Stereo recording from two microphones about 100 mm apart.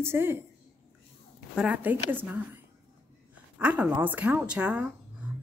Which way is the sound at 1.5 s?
10° right (ahead or behind).